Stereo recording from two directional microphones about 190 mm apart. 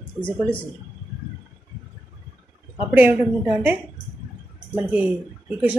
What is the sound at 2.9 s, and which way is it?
Speech, 10° right (ahead or behind).